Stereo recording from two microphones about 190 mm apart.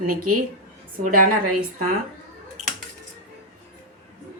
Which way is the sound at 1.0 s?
45° right (ahead or behind).